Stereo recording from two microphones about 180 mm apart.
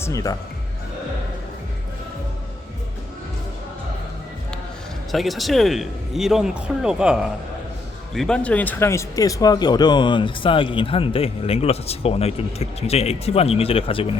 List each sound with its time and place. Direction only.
0.0 s speech: 20° left (ahead or behind)
5.1 s speech: centre (ahead or behind); by 14.1 s 30° left (ahead or behind)